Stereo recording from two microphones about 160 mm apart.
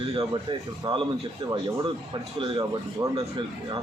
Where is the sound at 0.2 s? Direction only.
30° right (ahead or behind).